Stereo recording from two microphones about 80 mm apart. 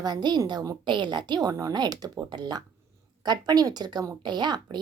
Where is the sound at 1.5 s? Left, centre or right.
Right.